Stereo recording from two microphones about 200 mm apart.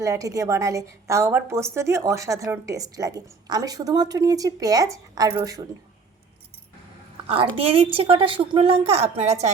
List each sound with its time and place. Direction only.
0.0 s a woman's voice: 15° right (ahead or behind)
7.3 s a woman's voice: 30° right (ahead or behind)